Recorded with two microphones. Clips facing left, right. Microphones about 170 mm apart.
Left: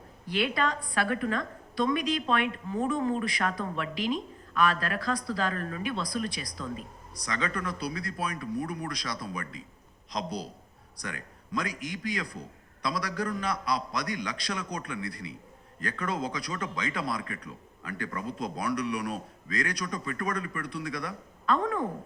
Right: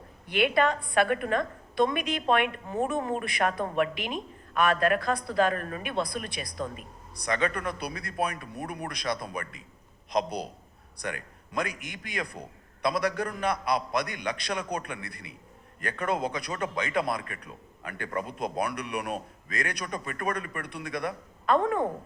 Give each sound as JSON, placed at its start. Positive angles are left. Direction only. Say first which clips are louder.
{"t": 0.3, "sound": "a man's voice", "louder": "right 4 dB", "side_deg": -55}